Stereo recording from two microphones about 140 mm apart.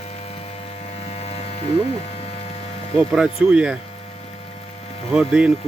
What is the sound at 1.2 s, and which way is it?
Mains hum, 45° left (ahead or behind).